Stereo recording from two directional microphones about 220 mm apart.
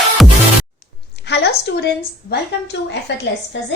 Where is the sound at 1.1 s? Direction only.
50° left (ahead or behind).